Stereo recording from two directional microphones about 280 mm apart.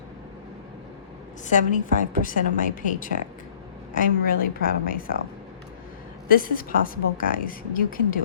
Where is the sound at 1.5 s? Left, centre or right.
Left.